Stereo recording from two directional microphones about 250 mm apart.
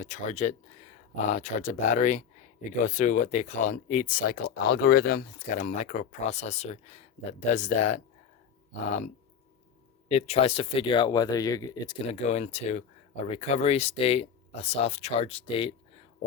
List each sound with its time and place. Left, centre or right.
0.0 s speech: left
10.1 s speech: left